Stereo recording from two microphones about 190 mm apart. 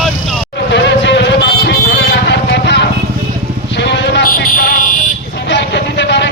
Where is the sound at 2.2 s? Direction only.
65° left (ahead or behind).